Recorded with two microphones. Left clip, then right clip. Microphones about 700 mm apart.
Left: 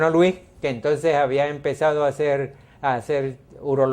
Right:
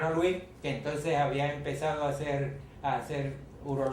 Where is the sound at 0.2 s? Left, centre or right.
Left.